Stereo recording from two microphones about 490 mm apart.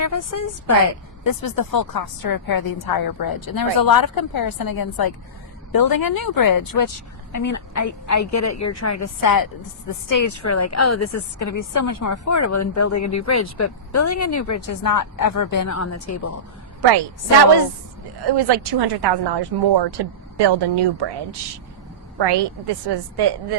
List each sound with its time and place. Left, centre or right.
0.0 s a woman's voice: left
18.3 s a woman's voice: right
22.2 s a woman's voice: right